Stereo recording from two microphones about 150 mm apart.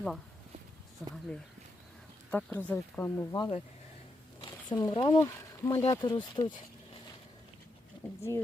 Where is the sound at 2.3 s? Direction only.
10° left (ahead or behind); by 5.2 s 35° left (ahead or behind).